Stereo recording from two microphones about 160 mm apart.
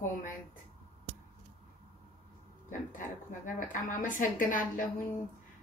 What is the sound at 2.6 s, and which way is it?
A woman's voice, 55° left (ahead or behind).